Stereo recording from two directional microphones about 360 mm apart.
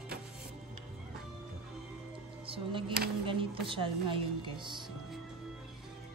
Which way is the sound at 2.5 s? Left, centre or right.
Centre.